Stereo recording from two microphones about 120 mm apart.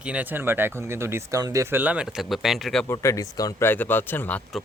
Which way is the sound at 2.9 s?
25° left (ahead or behind).